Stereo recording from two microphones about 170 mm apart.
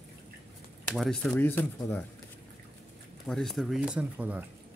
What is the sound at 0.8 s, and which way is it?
Speech, centre (ahead or behind).